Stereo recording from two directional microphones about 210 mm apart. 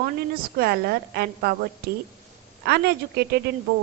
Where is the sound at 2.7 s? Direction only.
50° right (ahead or behind).